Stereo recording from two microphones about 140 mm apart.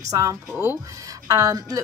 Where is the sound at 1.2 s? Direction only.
25° right (ahead or behind).